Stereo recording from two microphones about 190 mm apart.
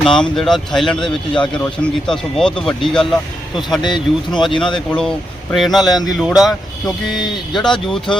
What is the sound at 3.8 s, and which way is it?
Speech, 25° left (ahead or behind).